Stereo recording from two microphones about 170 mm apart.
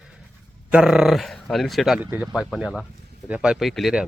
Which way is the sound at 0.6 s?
5° right (ahead or behind).